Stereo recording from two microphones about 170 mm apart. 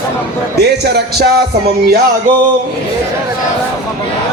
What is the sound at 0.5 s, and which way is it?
Speech, 75° right (ahead or behind).